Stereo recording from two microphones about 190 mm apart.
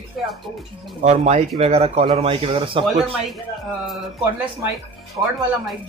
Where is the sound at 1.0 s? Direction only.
35° right (ahead or behind).